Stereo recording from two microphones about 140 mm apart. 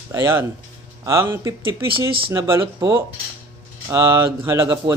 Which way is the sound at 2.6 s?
30° right (ahead or behind).